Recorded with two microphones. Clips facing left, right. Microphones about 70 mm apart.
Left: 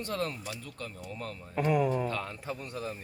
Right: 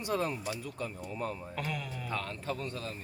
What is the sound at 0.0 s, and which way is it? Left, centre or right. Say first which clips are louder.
Speech: right 2 dB; centre.